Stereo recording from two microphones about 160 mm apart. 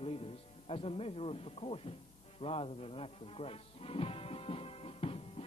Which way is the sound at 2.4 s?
35° left (ahead or behind).